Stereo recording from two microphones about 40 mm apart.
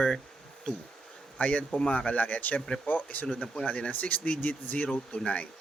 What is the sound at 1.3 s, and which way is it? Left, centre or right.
Speech, left.